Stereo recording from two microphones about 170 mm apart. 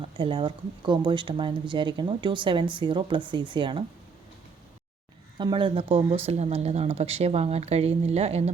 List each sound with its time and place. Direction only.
0.2 s speech: 30° right (ahead or behind)
5.4 s speech: 30° right (ahead or behind)